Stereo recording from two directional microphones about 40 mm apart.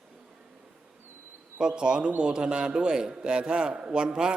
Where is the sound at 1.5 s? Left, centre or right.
Right.